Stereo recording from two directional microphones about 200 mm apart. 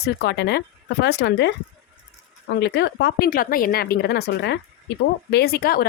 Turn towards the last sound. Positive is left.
turn(degrees=45)  # may be behind; listen again after turning